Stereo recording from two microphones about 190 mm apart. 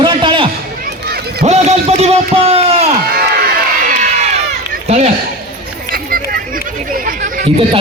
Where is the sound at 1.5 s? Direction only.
35° right (ahead or behind).